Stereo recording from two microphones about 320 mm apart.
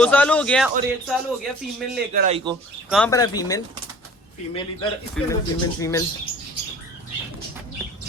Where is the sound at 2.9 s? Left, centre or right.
Centre.